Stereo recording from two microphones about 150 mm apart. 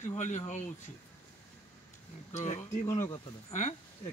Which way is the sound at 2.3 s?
45° left (ahead or behind).